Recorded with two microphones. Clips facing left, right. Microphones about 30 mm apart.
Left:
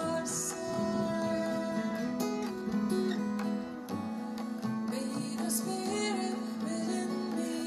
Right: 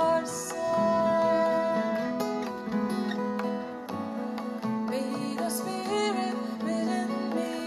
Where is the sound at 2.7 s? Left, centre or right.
Right.